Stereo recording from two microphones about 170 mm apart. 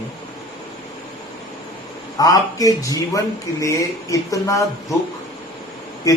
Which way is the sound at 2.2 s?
20° left (ahead or behind).